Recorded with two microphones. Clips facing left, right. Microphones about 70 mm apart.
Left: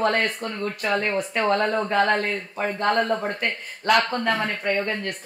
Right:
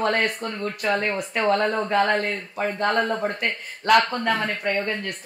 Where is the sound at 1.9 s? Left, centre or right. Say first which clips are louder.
Even; left.